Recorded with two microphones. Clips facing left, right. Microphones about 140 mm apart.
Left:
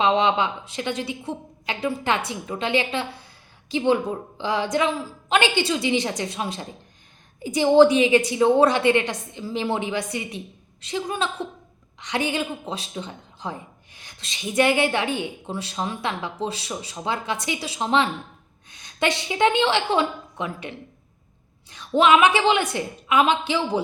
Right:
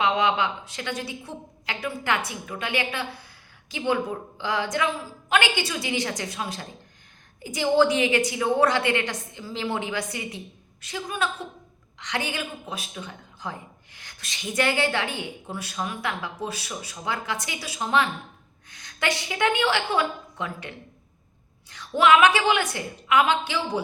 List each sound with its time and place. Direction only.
0.0 s speech: 20° left (ahead or behind)